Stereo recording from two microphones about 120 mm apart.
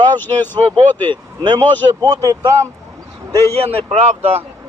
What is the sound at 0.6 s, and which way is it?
Speech, 45° right (ahead or behind).